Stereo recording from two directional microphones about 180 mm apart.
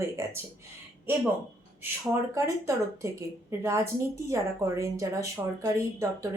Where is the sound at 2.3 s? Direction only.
15° right (ahead or behind).